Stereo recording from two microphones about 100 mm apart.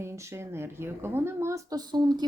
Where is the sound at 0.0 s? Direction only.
30° right (ahead or behind).